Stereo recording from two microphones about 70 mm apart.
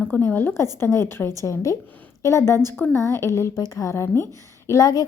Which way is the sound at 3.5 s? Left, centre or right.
Left.